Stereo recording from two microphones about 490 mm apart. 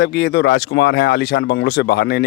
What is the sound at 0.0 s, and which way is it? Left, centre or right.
Speech, centre.